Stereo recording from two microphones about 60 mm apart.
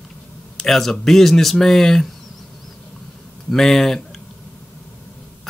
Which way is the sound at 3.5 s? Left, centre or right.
Centre.